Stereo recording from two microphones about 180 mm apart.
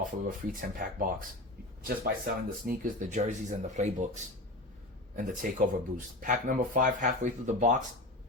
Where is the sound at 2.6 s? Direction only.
45° right (ahead or behind).